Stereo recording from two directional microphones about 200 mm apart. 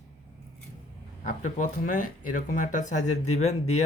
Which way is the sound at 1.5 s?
40° left (ahead or behind).